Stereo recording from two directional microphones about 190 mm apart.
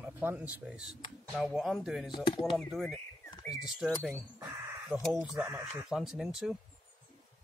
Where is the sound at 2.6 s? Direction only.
Centre (ahead or behind).